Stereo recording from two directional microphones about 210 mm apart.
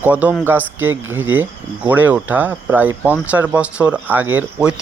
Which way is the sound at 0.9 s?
75° right (ahead or behind).